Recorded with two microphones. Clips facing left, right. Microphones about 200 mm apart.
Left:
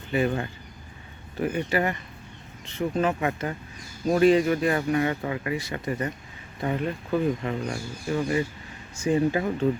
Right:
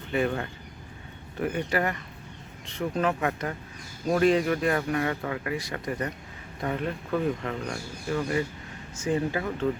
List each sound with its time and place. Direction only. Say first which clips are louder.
0.1 s speech: left 2 dB; 5° left (ahead or behind); by 9.6 s 20° left (ahead or behind)